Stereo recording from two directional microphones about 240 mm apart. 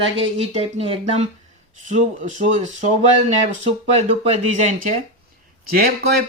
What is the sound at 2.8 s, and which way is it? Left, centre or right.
Speech, right.